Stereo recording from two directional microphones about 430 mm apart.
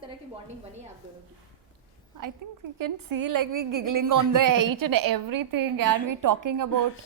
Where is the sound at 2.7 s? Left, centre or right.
Right.